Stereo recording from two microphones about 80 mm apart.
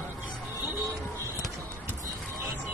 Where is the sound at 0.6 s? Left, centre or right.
Right.